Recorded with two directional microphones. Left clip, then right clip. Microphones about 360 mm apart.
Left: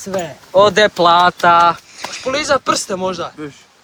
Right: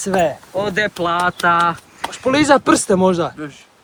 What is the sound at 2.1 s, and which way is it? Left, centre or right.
Speech, right.